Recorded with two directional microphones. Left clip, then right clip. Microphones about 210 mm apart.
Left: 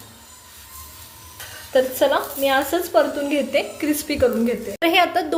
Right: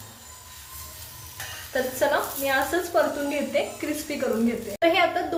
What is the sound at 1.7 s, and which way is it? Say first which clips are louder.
A woman's voice: left 6 dB; 40° left (ahead or behind).